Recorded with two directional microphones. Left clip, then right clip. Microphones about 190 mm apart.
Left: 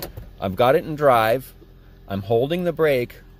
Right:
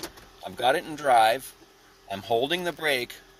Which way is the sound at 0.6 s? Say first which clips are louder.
Left 7 dB; 30° left (ahead or behind).